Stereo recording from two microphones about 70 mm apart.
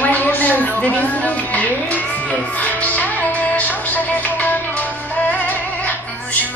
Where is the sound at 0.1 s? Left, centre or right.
Left.